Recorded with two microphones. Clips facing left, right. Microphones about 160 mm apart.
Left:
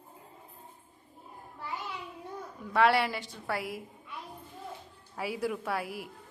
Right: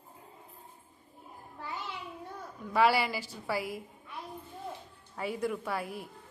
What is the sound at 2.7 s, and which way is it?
A woman's voice, centre (ahead or behind).